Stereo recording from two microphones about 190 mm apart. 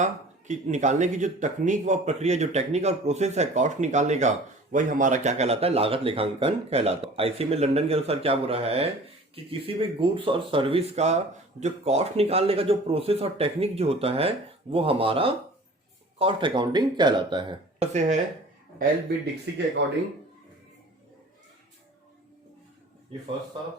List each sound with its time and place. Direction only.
0.0 s speech: 40° right (ahead or behind)
18.8 s speech: 60° right (ahead or behind)